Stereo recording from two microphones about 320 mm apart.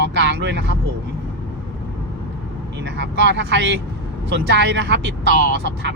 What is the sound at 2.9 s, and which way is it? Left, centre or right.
Speech, right.